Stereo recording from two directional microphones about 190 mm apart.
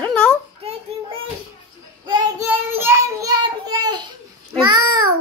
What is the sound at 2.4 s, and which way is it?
Child singing, 10° right (ahead or behind).